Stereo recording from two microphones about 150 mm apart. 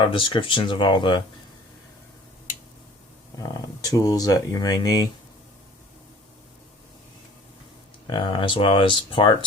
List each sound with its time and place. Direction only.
0.0 s speech: 35° left (ahead or behind)
3.3 s speech: 25° left (ahead or behind)
8.0 s speech: 35° left (ahead or behind)